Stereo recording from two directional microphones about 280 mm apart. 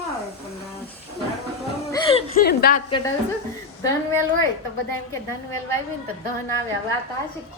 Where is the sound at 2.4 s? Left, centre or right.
Left.